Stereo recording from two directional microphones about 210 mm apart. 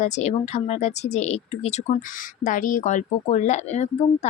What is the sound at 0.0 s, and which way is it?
Speech, 30° left (ahead or behind).